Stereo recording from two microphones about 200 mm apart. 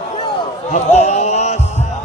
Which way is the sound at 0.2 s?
35° left (ahead or behind).